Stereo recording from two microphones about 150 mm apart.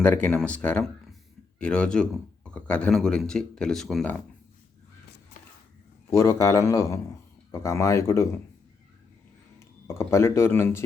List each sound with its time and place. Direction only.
0.0 s speech: 10° left (ahead or behind)
6.1 s a man's voice: 20° left (ahead or behind)
9.6 s speech: 20° left (ahead or behind)